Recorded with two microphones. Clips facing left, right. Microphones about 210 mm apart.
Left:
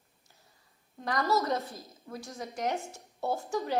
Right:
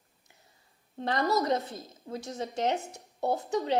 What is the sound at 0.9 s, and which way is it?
Speech, 30° right (ahead or behind).